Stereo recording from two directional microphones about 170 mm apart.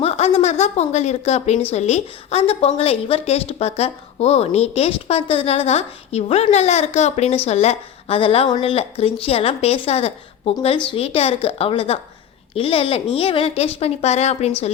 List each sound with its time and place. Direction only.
0.0 s a woman's voice: 35° left (ahead or behind)